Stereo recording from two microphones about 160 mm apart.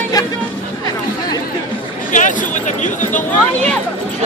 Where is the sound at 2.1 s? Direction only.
55° left (ahead or behind).